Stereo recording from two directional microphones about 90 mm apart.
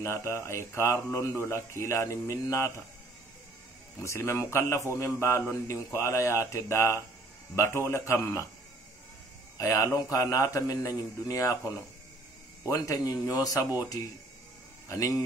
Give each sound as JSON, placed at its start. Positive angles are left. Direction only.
{"t": 0.0, "sound": "a man's voice", "side_deg": 30}
{"t": 4.0, "sound": "a man's voice", "side_deg": 30}
{"t": 9.6, "sound": "a man's voice", "side_deg": 35}
{"t": 14.9, "sound": "a man's voice", "side_deg": 40}